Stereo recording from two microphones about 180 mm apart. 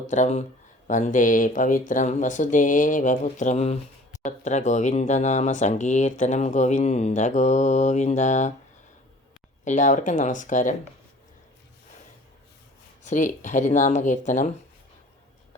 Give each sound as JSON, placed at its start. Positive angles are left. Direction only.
{"t": 0.1, "sound": "speech", "side_deg": 40}
{"t": 9.6, "sound": "speech", "side_deg": 45}
{"t": 13.1, "sound": "speech", "side_deg": 45}